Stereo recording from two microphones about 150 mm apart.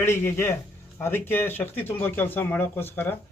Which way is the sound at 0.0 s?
15° left (ahead or behind).